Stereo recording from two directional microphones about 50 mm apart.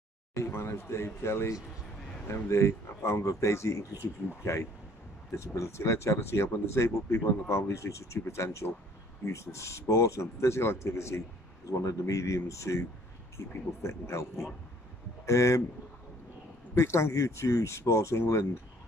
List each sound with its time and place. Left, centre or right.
0.4 s speech: left
5.3 s speech: left
6.4 s speech: left
11.8 s a man's voice: left
13.5 s speech: left
15.2 s speech: left
16.7 s speech: left